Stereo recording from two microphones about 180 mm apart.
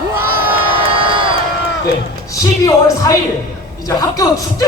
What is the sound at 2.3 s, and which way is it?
Speech, 20° left (ahead or behind).